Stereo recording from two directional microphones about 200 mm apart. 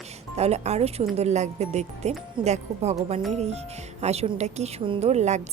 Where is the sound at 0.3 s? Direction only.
30° right (ahead or behind).